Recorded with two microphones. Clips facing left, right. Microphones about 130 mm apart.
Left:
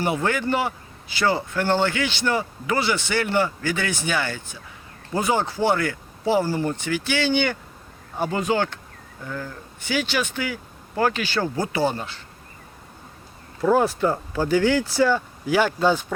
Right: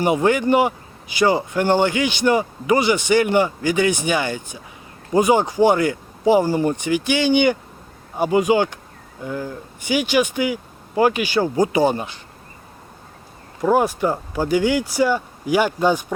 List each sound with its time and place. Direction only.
0.0 s speech: 15° right (ahead or behind)
13.6 s speech: 15° right (ahead or behind)